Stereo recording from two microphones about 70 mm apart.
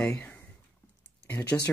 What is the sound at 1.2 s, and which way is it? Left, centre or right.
Speech, left.